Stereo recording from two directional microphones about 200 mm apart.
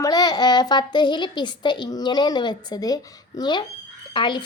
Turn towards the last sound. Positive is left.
turn(degrees=25)  # may be behind; listen again after turning